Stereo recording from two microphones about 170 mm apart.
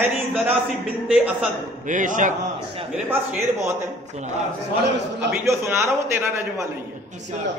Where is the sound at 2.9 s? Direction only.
10° right (ahead or behind).